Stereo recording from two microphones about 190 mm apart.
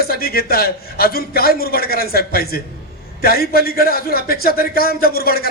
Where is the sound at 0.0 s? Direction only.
55° left (ahead or behind).